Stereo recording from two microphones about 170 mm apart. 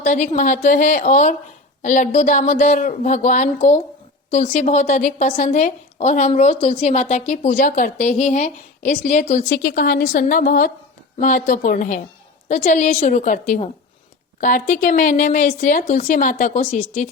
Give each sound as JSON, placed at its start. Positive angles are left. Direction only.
{"t": 0.0, "sound": "a woman's voice", "side_deg": 45}
{"t": 9.7, "sound": "a woman's voice", "side_deg": 55}